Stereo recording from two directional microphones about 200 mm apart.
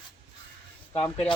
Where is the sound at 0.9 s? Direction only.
30° left (ahead or behind).